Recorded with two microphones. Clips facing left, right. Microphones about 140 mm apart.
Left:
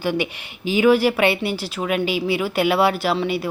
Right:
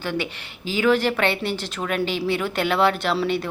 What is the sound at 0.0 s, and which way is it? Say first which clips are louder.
A woman's voice: left 4 dB; 15° left (ahead or behind).